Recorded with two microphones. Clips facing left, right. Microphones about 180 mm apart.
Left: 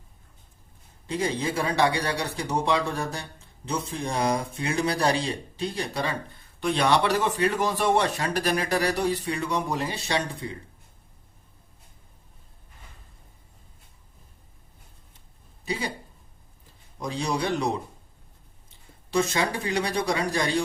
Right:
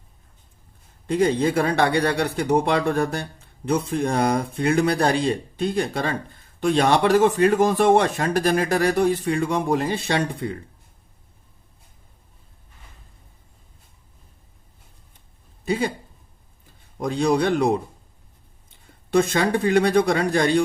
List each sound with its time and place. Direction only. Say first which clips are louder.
1.0 s speech: right 8 dB; 55° right (ahead or behind)
15.6 s speech: right 8 dB; 50° right (ahead or behind)
17.0 s speech: right 8 dB; 55° right (ahead or behind)
19.1 s speech: right 6 dB; 55° right (ahead or behind)